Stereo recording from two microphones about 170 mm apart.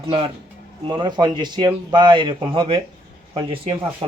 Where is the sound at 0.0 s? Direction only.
30° right (ahead or behind).